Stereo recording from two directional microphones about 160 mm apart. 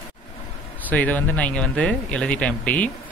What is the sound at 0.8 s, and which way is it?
Speech, 10° left (ahead or behind).